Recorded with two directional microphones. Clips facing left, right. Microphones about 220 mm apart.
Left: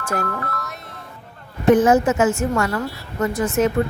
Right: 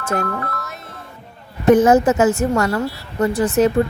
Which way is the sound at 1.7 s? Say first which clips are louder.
Right 3 dB; 40° right (ahead or behind).